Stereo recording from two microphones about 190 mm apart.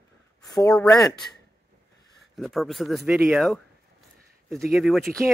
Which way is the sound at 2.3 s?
Centre (ahead or behind).